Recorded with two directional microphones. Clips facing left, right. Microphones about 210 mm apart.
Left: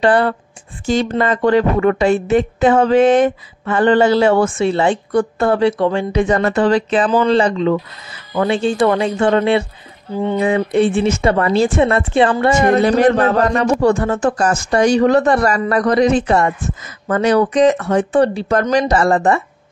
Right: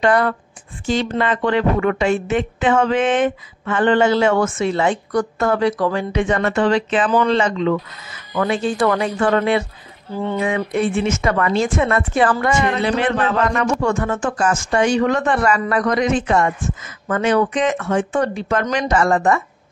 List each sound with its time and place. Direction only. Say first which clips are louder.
0.0 s a woman's voice: left 3 dB; 30° left (ahead or behind)
0.8 s a woman's voice: left 3 dB; 45° left (ahead or behind); by 10.4 s 15° left (ahead or behind)
10.4 s a woman's voice: left 6 dB; 30° left (ahead or behind)
12.4 s a woman's voice: left 6 dB; 40° left (ahead or behind)